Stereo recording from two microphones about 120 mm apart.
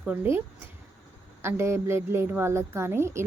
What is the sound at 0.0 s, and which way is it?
A woman's voice, 15° right (ahead or behind).